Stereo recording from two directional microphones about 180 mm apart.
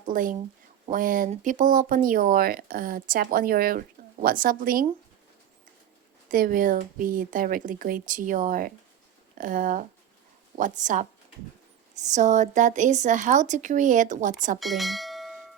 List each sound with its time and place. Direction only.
0.1 s speech: 50° right (ahead or behind)
6.3 s speech: 50° right (ahead or behind)
12.0 s speech: 40° right (ahead or behind)
14.6 s speech: centre (ahead or behind)